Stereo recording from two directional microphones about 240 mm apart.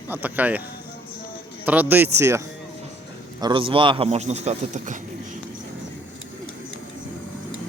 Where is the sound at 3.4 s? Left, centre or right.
Right.